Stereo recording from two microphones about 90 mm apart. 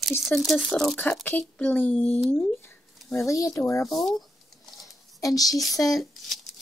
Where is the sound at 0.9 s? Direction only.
15° left (ahead or behind).